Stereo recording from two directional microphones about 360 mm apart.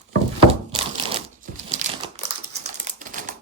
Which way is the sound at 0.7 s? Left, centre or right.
Centre.